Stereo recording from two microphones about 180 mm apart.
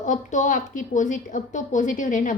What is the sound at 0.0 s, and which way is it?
A woman's voice, 45° left (ahead or behind).